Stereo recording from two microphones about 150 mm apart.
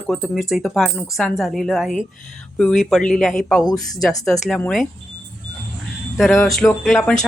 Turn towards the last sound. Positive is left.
turn(degrees=5)  # may be behind; listen again after turning